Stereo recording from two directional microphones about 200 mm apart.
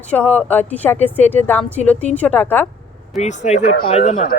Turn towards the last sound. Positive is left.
turn(degrees=40)  # may be behind; listen again after turning